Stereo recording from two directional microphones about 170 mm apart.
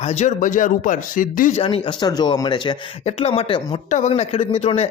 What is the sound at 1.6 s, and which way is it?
Speech, 30° left (ahead or behind).